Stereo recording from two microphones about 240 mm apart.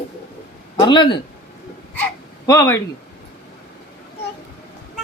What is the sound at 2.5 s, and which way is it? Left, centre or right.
Speech, centre.